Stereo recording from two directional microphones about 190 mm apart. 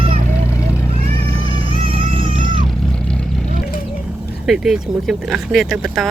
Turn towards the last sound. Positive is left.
turn(degrees=0)  # may be behind; listen again after turning